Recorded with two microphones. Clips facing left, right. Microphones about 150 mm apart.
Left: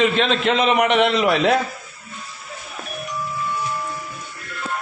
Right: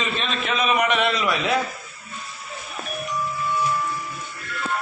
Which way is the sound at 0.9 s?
65° left (ahead or behind).